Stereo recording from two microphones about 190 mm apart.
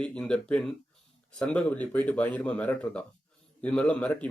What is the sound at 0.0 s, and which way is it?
Speech, 5° left (ahead or behind).